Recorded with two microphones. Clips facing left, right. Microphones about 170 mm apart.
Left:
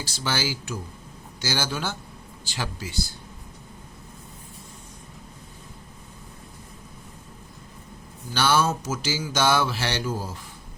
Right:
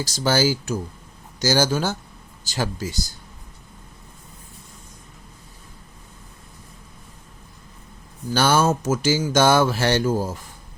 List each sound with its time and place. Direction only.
0.0 s speech: 40° right (ahead or behind)
8.3 s speech: 45° right (ahead or behind)